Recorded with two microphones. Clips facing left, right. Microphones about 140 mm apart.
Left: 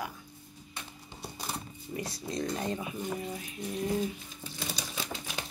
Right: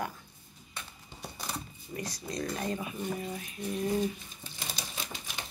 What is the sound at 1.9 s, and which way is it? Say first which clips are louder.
Speech: left 1 dB; 25° left (ahead or behind).